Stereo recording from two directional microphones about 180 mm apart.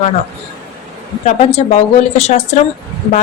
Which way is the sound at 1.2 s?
40° left (ahead or behind).